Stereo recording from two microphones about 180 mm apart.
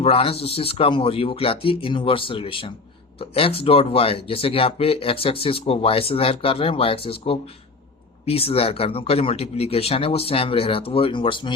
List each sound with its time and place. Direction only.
0.0 s speech: 35° left (ahead or behind)